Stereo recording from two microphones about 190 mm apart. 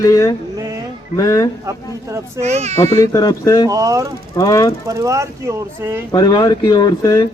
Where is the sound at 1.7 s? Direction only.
15° right (ahead or behind).